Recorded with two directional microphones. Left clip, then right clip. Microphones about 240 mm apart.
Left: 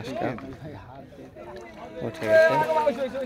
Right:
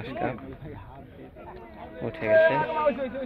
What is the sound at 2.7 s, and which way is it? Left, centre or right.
Speech, left.